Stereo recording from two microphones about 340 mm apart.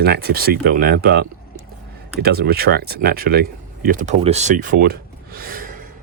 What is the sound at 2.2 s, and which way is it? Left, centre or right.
Speech, right.